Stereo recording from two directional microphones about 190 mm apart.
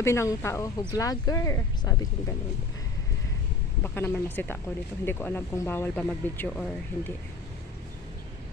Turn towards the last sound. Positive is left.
turn(degrees=10)  # may be behind; listen again after turning